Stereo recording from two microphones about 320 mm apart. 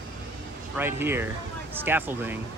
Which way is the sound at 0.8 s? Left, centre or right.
Centre.